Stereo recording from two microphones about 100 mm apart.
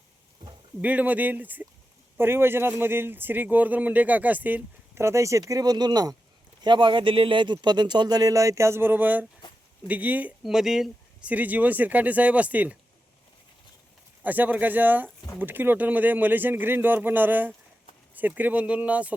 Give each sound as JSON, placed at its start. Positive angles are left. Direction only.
{"t": 0.8, "sound": "speech", "side_deg": -15}
{"t": 6.7, "sound": "speech", "side_deg": -50}
{"t": 10.4, "sound": "speech", "side_deg": -5}
{"t": 14.3, "sound": "speech", "side_deg": -15}